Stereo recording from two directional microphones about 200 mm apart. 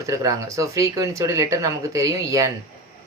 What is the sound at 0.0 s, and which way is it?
Speech, 15° right (ahead or behind).